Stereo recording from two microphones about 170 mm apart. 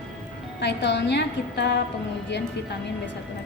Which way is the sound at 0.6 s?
90° left.